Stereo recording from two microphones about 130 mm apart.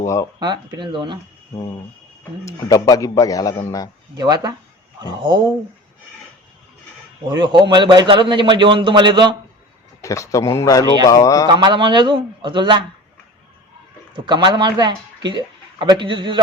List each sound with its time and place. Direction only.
0.0 s speech: 25° left (ahead or behind)
0.3 s speech: 35° right (ahead or behind)
2.4 s a man's voice: 25° left (ahead or behind)
4.1 s speech: 35° right (ahead or behind)
7.3 s speech: 35° right (ahead or behind)
10.0 s a man's voice: 25° left (ahead or behind)
11.5 s speech: 40° right (ahead or behind)
14.3 s speech: 35° right (ahead or behind)